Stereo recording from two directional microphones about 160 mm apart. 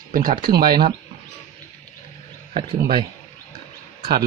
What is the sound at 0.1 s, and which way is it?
Speech, 60° right (ahead or behind).